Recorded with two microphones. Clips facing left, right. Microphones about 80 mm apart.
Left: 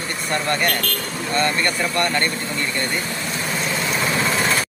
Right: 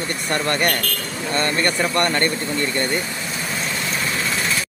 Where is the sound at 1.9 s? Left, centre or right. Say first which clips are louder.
Right 1 dB; right.